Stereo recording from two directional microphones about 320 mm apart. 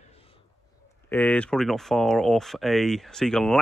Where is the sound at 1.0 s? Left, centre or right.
Centre.